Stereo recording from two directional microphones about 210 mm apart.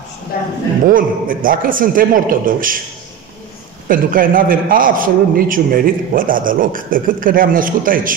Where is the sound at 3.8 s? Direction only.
40° right (ahead or behind).